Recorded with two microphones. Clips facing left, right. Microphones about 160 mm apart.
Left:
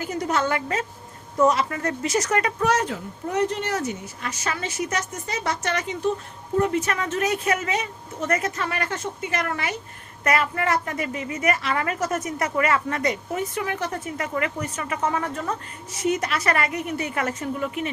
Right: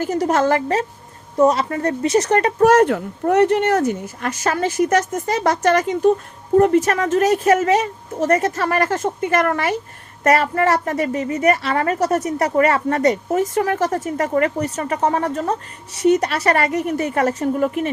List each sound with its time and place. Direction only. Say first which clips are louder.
0.0 s speech: right 7 dB; 40° right (ahead or behind)
2.6 s a woman's voice: right 10 dB; 60° right (ahead or behind)
10.2 s speech: right 7 dB; 35° right (ahead or behind)